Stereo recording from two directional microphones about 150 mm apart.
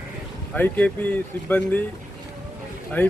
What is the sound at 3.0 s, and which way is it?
Speech, 10° left (ahead or behind).